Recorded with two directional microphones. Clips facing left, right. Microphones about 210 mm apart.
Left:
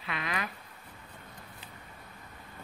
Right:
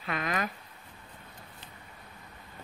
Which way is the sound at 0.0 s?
45° right (ahead or behind).